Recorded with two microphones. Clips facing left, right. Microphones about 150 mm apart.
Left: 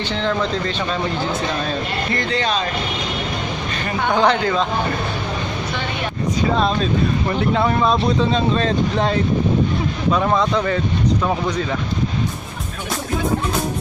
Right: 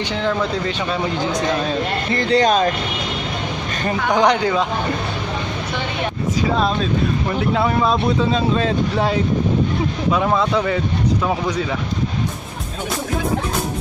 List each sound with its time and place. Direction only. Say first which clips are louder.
2.1 s speech: right 7 dB; 40° right (ahead or behind)
4.1 s speech: right 1 dB; 15° right (ahead or behind)
6.4 s speech: left 1 dB; 5° right (ahead or behind)